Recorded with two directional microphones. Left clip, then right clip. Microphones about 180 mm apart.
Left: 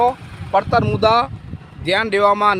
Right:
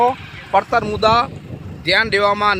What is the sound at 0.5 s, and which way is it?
Speech, 20° right (ahead or behind).